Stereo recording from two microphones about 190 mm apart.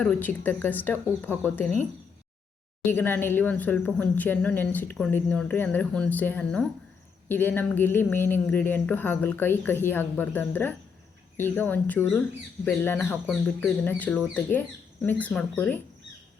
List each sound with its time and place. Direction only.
0.0 s speech: 10° left (ahead or behind)
2.8 s speech: 10° left (ahead or behind)